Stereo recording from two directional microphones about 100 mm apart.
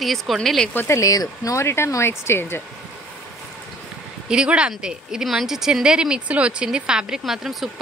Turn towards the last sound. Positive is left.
turn(degrees=-5)  # may be behind; listen again after turning